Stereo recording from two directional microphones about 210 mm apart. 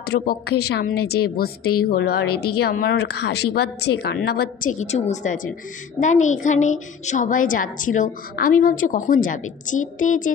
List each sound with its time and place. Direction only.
0.0 s a woman's voice: 50° left (ahead or behind)